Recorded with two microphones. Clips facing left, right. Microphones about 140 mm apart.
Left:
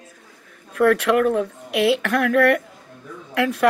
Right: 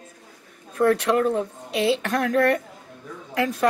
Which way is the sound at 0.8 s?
25° right (ahead or behind).